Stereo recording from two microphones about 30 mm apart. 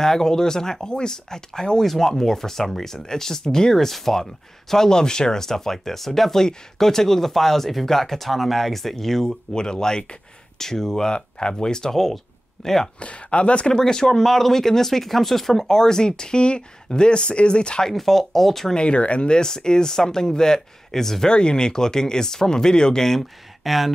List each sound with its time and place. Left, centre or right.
0.0 s speech: centre
3.7 s speech: centre
9.5 s speech: left
11.1 s speech: left
11.9 s speech: centre
13.0 s speech: left
13.7 s speech: left
17.9 s speech: centre
18.7 s speech: left
19.3 s speech: left
21.3 s speech: left
23.6 s speech: centre